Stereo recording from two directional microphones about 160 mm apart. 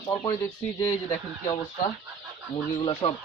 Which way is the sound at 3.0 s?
35° left (ahead or behind).